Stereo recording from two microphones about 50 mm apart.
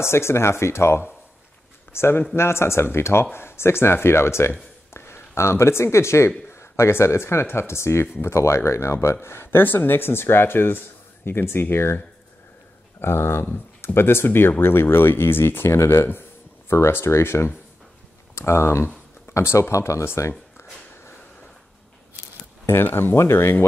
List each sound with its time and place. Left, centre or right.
0.0 s speech: left
9.1 s speech: left
13.0 s speech: left
15.8 s a sound: left
16.7 s speech: left
19.7 s speech: left
22.7 s speech: left